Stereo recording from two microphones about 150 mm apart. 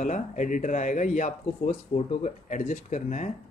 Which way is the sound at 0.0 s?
55° left (ahead or behind).